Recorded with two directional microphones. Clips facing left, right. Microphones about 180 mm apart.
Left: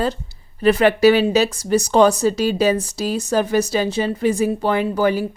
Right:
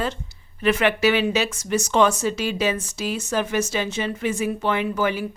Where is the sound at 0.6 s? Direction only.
35° left (ahead or behind).